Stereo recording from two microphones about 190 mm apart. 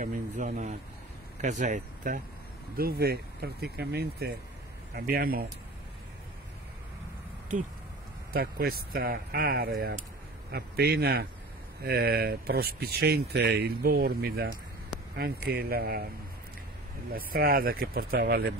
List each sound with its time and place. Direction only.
0.0 s speech: 45° right (ahead or behind)
8.3 s speech: 55° right (ahead or behind)
17.1 s speech: 50° right (ahead or behind)